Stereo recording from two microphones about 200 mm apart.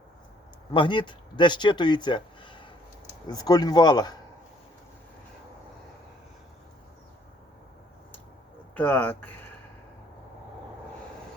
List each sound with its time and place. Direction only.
0.7 s speech: 25° left (ahead or behind)
8.7 s speech: 10° left (ahead or behind)